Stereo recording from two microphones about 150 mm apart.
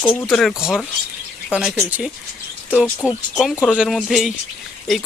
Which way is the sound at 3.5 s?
10° left (ahead or behind).